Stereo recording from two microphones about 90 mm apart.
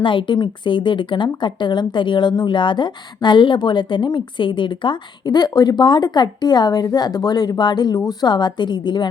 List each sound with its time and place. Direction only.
0.0 s a woman's voice: 65° left (ahead or behind)